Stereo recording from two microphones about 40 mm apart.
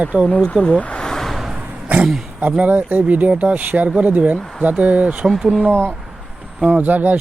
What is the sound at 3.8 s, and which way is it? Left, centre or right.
Speech, right.